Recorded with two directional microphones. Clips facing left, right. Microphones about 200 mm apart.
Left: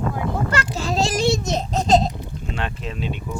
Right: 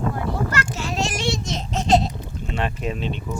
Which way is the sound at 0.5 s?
35° left (ahead or behind).